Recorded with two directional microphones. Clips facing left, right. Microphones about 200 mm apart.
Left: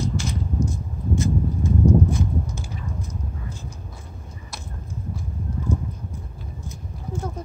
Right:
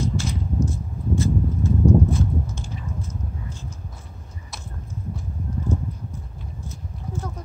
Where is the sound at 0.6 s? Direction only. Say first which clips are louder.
Right 1 dB; 15° left (ahead or behind).